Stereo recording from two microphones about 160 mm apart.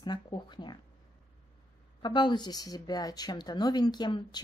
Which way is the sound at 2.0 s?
30° left (ahead or behind).